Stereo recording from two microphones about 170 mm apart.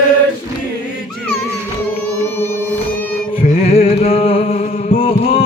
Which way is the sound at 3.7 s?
35° left (ahead or behind).